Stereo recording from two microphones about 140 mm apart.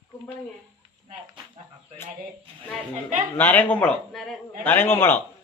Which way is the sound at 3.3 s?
15° left (ahead or behind).